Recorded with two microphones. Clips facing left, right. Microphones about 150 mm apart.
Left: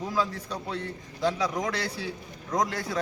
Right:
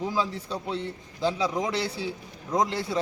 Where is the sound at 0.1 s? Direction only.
30° right (ahead or behind).